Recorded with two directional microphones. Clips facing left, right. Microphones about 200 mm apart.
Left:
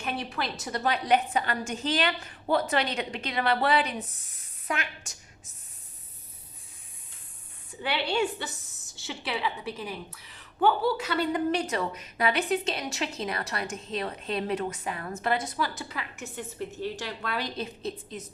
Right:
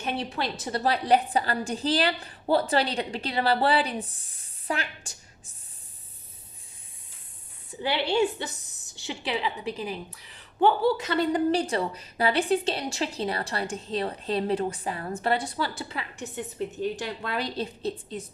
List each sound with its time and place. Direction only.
0.2 s a woman's voice: 30° right (ahead or behind)
7.8 s a woman's voice: 25° right (ahead or behind)
17.6 s a woman's voice: 30° right (ahead or behind)